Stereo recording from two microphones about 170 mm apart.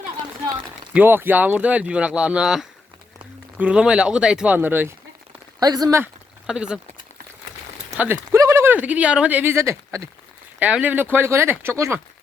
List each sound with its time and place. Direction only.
0.9 s speech: 10° right (ahead or behind)
5.5 s speech: 20° right (ahead or behind)
6.5 s speech: 5° right (ahead or behind)
7.9 s speech: 10° right (ahead or behind)